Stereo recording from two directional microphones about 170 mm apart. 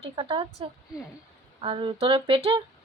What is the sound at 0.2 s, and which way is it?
A woman's voice, 30° right (ahead or behind).